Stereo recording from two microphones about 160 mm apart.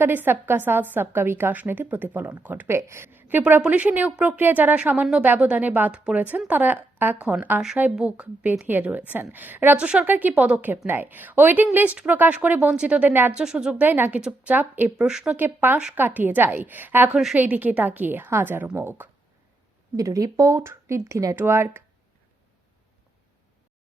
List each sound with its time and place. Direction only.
0.0 s a woman's voice: 15° right (ahead or behind)